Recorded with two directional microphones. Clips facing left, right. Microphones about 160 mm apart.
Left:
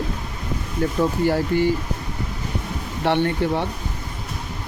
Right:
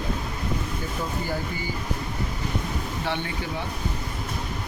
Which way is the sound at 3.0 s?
65° left (ahead or behind).